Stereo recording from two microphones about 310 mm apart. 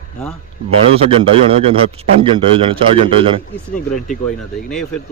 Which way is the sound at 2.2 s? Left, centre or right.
Centre.